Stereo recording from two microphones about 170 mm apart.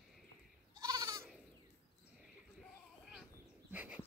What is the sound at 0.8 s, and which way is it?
Goat, 20° right (ahead or behind).